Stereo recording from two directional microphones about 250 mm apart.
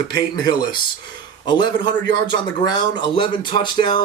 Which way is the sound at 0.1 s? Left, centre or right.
Centre.